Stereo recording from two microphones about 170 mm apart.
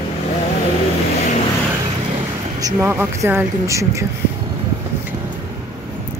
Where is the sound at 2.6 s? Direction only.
20° right (ahead or behind).